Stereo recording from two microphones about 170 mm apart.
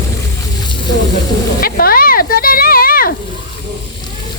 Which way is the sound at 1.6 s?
60° left (ahead or behind).